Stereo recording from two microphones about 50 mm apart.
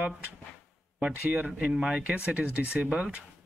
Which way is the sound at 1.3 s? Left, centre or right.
Right.